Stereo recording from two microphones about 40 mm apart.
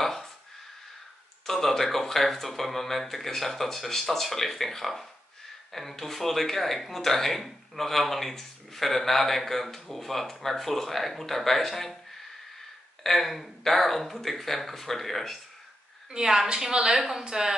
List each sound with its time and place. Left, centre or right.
0.0 s a sound: centre
1.4 s speech: centre
13.0 s speech: centre
16.1 s a woman's voice: centre
17.2 s a woman's voice: centre